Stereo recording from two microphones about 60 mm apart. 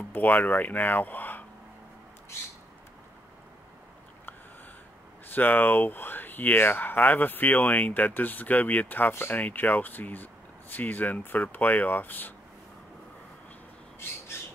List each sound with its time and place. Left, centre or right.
0.1 s speech: left
5.3 s speech: left